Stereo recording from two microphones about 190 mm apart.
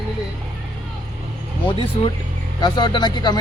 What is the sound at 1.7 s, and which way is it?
Speech, 25° left (ahead or behind).